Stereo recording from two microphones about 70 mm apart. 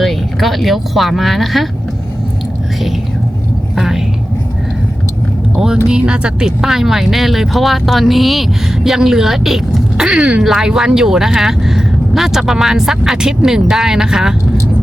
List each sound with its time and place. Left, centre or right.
0.0 s speech: centre
3.8 s speech: centre
5.5 s speech: centre